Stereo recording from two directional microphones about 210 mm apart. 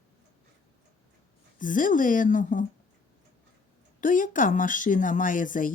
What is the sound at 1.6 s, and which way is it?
Speech, 40° left (ahead or behind).